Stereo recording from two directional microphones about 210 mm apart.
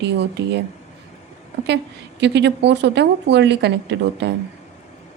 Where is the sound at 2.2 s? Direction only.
55° right (ahead or behind).